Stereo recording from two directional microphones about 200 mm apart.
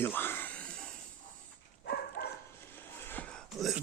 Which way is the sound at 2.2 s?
60° left (ahead or behind).